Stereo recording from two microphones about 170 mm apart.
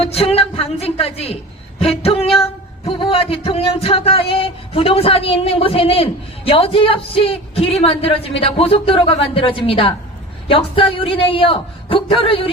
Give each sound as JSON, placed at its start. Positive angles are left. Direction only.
{"t": 0.0, "sound": "speech", "side_deg": 35}